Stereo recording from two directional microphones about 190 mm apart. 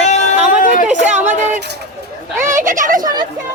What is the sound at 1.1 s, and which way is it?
Speech, 40° right (ahead or behind).